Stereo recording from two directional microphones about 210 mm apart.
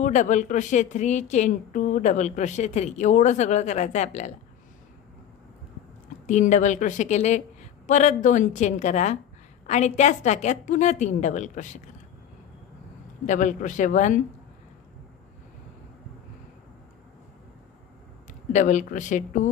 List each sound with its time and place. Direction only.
0.0 s a woman's voice: 35° left (ahead or behind)
6.2 s a woman's voice: 35° left (ahead or behind)
13.3 s a woman's voice: 35° left (ahead or behind)
18.5 s a woman's voice: 35° left (ahead or behind)